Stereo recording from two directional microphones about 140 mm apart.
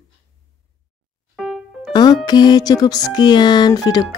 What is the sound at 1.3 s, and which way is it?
Music, centre (ahead or behind).